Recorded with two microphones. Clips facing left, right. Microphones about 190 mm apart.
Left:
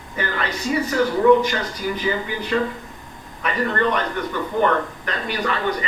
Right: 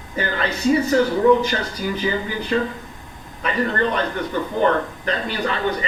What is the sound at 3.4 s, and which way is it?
A man's voice, 30° right (ahead or behind).